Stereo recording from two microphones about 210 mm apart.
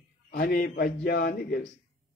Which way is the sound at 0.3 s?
45° left (ahead or behind).